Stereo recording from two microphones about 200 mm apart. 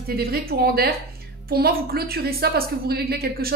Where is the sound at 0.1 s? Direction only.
50° right (ahead or behind).